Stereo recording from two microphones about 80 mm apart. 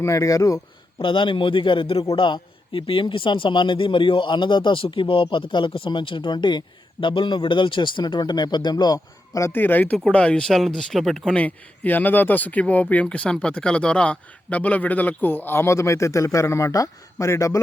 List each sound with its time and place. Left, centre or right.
0.0 s speech: left
1.0 s speech: left
9.5 s speech: left; by 11.2 s centre
11.3 s speech: centre; by 17.6 s left